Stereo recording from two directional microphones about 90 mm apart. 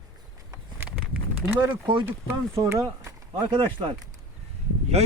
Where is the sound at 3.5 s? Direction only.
75° right (ahead or behind).